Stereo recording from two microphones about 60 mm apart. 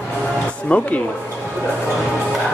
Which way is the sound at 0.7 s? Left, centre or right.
Left.